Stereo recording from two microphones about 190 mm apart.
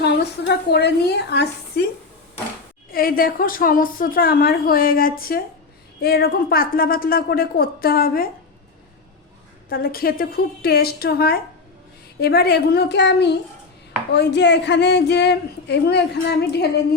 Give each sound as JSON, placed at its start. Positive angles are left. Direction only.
{"t": 0.0, "sound": "speech", "side_deg": 60}
{"t": 2.9, "sound": "a woman's voice", "side_deg": 50}
{"t": 9.6, "sound": "a woman's voice", "side_deg": 50}